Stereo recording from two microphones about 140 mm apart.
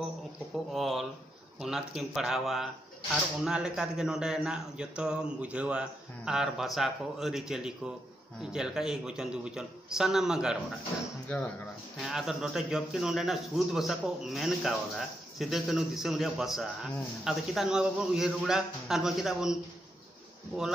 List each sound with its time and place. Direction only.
0.7 s speech: centre (ahead or behind)
11.2 s speech: 10° left (ahead or behind)
12.0 s speech: centre (ahead or behind)